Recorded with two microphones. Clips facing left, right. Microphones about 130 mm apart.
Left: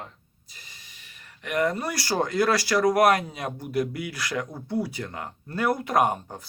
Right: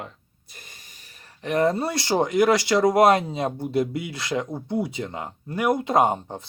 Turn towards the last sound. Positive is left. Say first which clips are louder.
# right 3 dB
turn(degrees=-25)  # may be behind; listen again after turning